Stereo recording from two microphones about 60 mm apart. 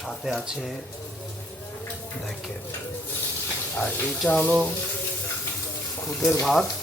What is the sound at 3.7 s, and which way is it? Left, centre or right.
Speech, left.